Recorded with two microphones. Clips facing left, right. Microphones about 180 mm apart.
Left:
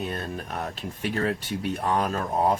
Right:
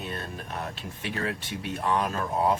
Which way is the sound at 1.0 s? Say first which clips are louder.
Left 5 dB; 40° left (ahead or behind).